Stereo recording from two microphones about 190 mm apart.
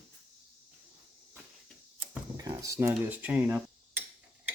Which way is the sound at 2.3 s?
20° right (ahead or behind).